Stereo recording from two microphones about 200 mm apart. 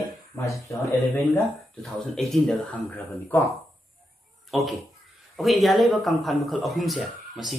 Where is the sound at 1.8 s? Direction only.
Centre (ahead or behind).